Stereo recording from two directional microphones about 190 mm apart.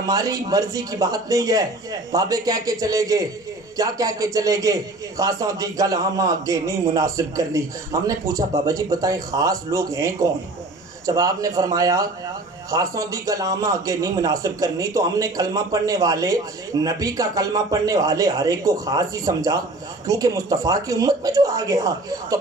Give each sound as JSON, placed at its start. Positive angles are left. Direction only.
{"t": 0.0, "sound": "a man's voice", "side_deg": -20}